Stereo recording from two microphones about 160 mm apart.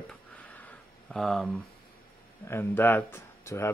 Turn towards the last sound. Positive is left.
turn(degrees=15)  # may be behind; listen again after turning